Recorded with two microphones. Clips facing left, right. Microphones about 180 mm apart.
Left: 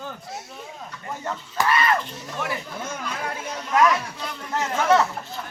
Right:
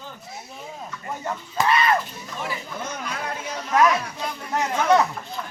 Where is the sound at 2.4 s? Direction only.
70° left (ahead or behind).